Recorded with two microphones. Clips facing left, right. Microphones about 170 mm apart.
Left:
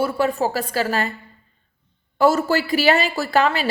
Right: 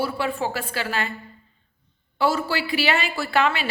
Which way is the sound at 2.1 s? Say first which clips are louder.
Left 6 dB; 45° left (ahead or behind).